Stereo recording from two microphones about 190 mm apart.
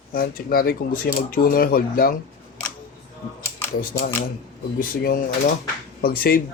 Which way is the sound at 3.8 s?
50° left (ahead or behind).